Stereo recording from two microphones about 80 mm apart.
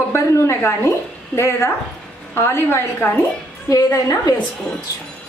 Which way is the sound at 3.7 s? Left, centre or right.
Left.